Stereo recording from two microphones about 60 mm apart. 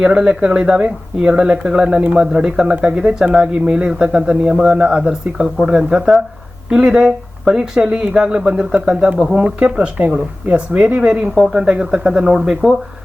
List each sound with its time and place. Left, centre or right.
0.0 s speech: centre